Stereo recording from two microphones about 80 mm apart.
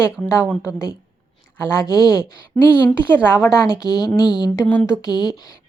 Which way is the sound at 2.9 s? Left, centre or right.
Left.